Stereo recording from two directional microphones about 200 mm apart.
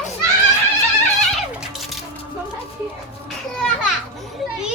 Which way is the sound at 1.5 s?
Centre (ahead or behind).